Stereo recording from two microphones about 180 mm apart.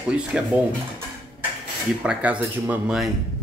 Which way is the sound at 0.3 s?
5° right (ahead or behind).